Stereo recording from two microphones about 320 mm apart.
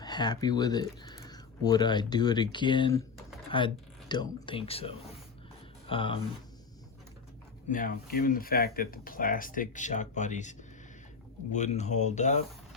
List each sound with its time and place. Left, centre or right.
0.0 s speech: centre
7.7 s speech: left
11.5 s speech: left